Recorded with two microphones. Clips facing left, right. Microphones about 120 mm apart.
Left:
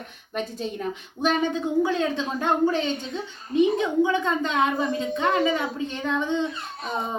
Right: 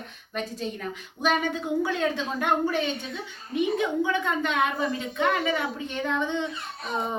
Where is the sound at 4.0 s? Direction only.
20° left (ahead or behind).